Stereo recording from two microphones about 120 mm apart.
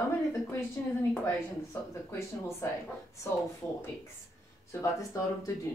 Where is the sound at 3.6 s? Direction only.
20° left (ahead or behind).